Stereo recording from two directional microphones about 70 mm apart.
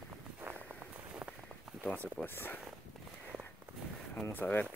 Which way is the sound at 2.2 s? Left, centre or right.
Left.